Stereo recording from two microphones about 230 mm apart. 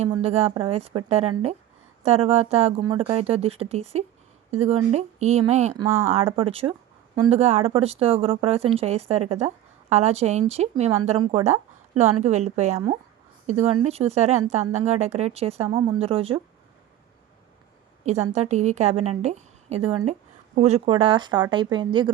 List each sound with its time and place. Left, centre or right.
0.0 s speech: right
5.7 s speech: centre
6.1 s speech: right
18.0 s speech: right